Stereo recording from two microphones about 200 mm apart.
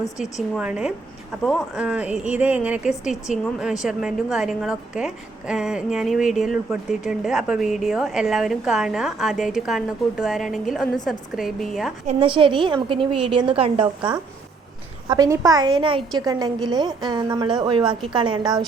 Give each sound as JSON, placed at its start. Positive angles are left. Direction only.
{"t": 0.5, "sound": "a woman's voice", "side_deg": -5}
{"t": 12.0, "sound": "a woman's voice", "side_deg": -25}
{"t": 15.1, "sound": "a woman's voice", "side_deg": -20}